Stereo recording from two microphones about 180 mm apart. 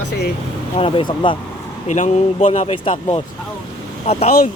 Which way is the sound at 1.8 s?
40° left (ahead or behind).